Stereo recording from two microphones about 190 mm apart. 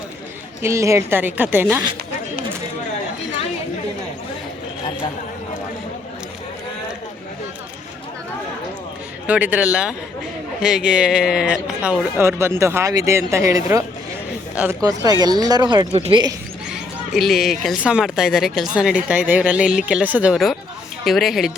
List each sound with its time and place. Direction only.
0.6 s speech: 15° right (ahead or behind)
9.2 s speech: 10° right (ahead or behind)
14.8 s speech: 20° right (ahead or behind)
16.7 s speech: centre (ahead or behind)